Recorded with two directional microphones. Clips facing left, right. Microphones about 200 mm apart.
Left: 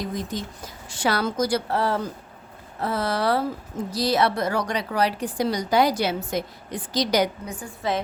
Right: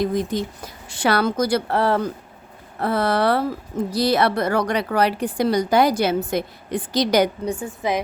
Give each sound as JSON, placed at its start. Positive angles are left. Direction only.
{"t": 0.0, "sound": "a woman's voice", "side_deg": -60}
{"t": 7.8, "sound": "a woman's voice", "side_deg": -15}